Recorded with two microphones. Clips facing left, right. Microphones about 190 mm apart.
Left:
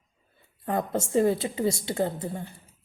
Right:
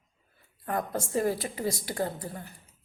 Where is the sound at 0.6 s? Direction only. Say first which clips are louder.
Left 4 dB; 25° left (ahead or behind).